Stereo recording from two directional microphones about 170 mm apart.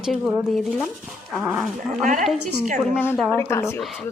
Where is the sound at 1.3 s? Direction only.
Centre (ahead or behind).